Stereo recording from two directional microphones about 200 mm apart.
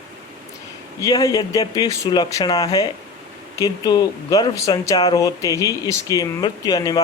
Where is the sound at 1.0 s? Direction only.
20° left (ahead or behind).